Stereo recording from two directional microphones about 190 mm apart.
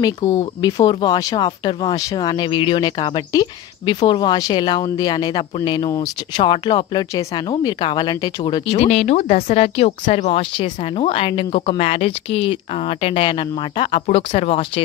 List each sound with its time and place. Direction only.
0.0 s speech: 20° left (ahead or behind)
8.6 s speech: 35° left (ahead or behind)